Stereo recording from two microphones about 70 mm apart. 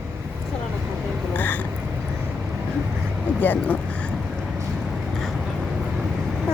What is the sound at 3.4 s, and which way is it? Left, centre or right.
Speech, left.